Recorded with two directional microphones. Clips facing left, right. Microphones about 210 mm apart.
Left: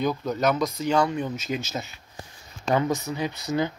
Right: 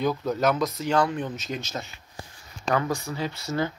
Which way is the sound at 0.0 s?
5° right (ahead or behind).